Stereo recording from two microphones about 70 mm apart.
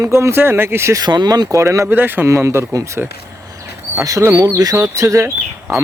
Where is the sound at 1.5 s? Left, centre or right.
Right.